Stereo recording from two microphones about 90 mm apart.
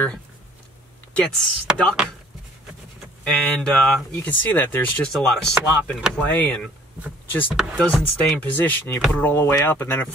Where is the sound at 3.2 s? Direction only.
10° left (ahead or behind).